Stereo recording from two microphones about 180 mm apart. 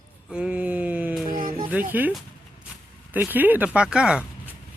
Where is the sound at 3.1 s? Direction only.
10° right (ahead or behind).